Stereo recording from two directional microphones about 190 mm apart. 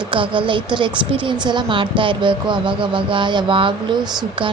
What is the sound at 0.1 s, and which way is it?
Speech, 25° right (ahead or behind).